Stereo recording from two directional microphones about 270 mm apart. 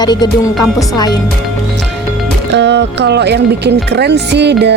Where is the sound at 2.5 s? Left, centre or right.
Right.